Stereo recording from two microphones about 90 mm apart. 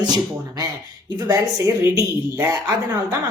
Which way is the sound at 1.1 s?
35° right (ahead or behind).